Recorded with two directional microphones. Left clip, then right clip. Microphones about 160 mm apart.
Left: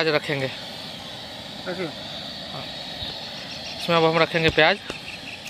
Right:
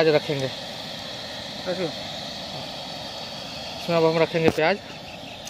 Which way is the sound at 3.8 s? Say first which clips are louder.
Left 1 dB; centre (ahead or behind).